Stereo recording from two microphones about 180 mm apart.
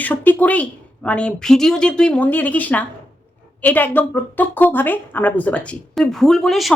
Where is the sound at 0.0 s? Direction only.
10° left (ahead or behind).